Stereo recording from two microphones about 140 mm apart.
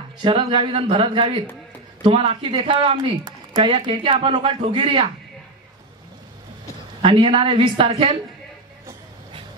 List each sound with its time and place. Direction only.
0.2 s speech: 40° right (ahead or behind)
7.0 s speech: 40° right (ahead or behind)